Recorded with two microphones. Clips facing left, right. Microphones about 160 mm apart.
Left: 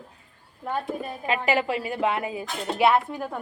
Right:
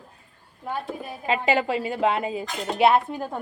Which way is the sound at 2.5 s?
Centre (ahead or behind).